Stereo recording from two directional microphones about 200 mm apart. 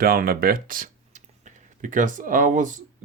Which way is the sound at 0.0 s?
45° right (ahead or behind).